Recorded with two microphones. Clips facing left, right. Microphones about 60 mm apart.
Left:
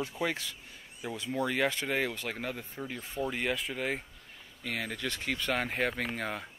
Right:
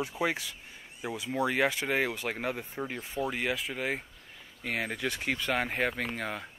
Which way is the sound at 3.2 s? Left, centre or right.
Centre.